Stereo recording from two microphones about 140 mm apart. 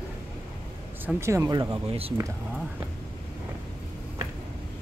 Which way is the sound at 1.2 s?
20° right (ahead or behind).